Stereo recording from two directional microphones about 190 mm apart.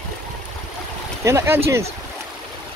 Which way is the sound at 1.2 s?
15° right (ahead or behind).